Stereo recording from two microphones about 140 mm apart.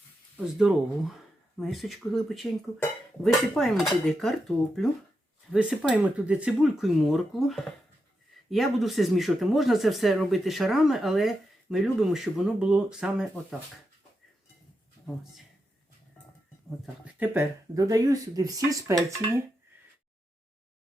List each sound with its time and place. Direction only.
0.6 s speech: centre (ahead or behind)
15.0 s speech: centre (ahead or behind)
17.2 s speech: 20° right (ahead or behind)